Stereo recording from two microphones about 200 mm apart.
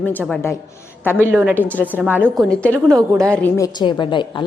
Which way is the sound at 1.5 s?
10° left (ahead or behind).